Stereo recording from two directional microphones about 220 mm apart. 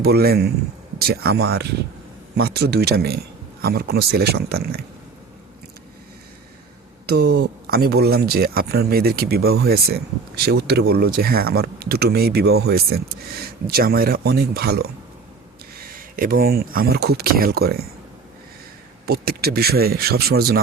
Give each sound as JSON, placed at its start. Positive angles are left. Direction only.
{"t": 0.0, "sound": "speech", "side_deg": -45}
{"t": 7.1, "sound": "speech", "side_deg": -45}
{"t": 16.0, "sound": "speech", "side_deg": -40}
{"t": 19.0, "sound": "speech", "side_deg": -45}